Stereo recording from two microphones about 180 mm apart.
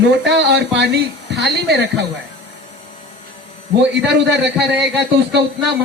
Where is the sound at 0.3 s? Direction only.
75° right (ahead or behind).